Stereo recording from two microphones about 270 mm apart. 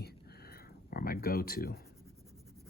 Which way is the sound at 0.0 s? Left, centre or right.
Left.